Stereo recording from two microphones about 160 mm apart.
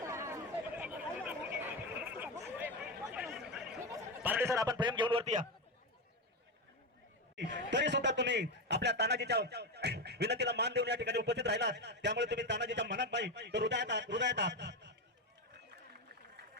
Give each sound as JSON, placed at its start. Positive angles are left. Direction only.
{"t": 0.0, "sound": "chatter", "side_deg": -20}
{"t": 3.8, "sound": "speech", "side_deg": -15}
{"t": 5.2, "sound": "a man's voice", "side_deg": -45}
{"t": 7.3, "sound": "a man's voice", "side_deg": -90}